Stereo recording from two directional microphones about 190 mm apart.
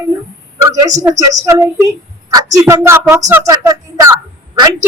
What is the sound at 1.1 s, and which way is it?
A woman's voice, 15° right (ahead or behind).